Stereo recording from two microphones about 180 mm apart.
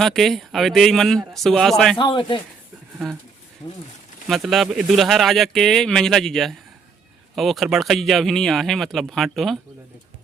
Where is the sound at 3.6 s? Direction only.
25° left (ahead or behind).